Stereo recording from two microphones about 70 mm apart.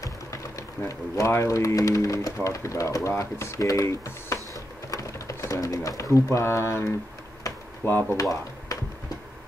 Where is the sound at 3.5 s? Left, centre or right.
Left.